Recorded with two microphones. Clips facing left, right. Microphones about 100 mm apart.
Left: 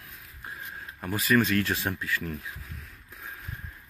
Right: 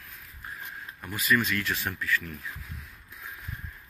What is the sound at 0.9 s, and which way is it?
Speech, 30° left (ahead or behind).